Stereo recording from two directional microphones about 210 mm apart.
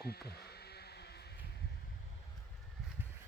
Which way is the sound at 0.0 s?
50° left (ahead or behind).